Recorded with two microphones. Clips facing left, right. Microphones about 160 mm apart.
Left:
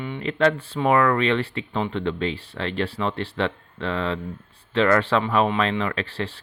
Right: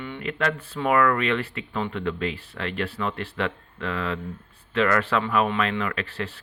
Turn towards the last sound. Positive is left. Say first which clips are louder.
# left 2 dB
turn(degrees=30)  # may be behind; listen again after turning